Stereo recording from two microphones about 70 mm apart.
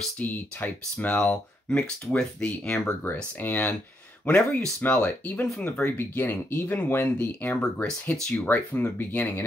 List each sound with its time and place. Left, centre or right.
0.2 s speech: left
4.3 s speech: centre
5.9 s speech: left
7.6 s speech: centre
8.5 s speech: left